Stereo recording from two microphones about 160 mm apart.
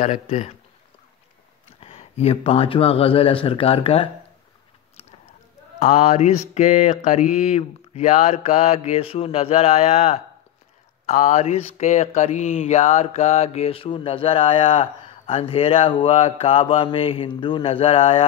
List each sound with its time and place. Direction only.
0.0 s mantra: 50° left (ahead or behind)
1.8 s speech: 40° left (ahead or behind)
5.8 s mantra: 45° left (ahead or behind)
11.1 s speech: 50° left (ahead or behind)